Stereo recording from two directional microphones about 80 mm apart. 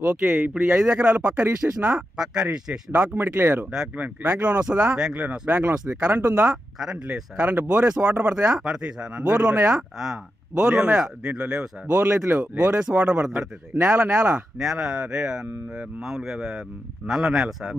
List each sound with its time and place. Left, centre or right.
0.0 s speech: right
0.3 s speech: centre
2.1 s speech: centre
2.9 s speech: right
6.5 s speech: centre
7.4 s speech: right
9.7 s speech: centre
11.9 s speech: right
13.7 s speech: right
14.6 s speech: centre